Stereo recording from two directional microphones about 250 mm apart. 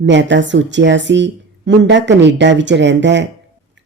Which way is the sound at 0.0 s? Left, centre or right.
Right.